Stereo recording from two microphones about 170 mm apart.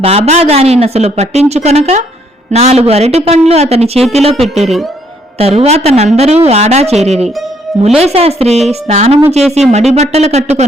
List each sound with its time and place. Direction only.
0.0 s speech: 35° right (ahead or behind)